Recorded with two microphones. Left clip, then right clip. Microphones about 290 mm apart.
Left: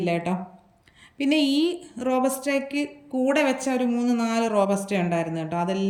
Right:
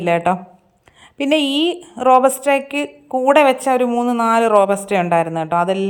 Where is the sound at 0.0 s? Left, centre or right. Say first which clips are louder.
Right 10 dB; centre.